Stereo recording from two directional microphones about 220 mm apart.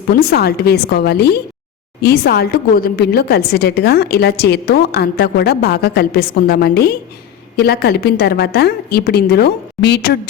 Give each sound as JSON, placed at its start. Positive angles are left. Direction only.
{"t": 0.1, "sound": "a woman's voice", "side_deg": 45}